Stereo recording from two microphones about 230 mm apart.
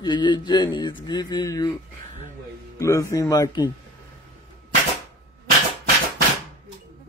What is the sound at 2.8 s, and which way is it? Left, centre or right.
Speech, centre.